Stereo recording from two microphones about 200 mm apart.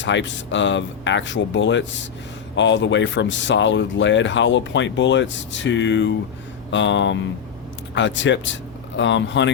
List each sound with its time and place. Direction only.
0.0 s speech: 65° left (ahead or behind)